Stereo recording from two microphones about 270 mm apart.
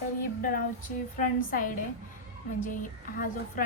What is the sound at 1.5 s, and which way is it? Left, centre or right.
A woman's voice, left.